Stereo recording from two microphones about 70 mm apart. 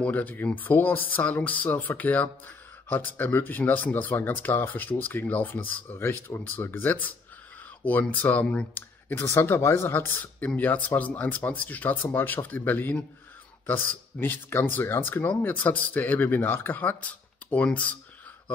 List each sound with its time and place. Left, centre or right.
0.0 s speech: left
9.1 s speech: left
14.2 s speech: left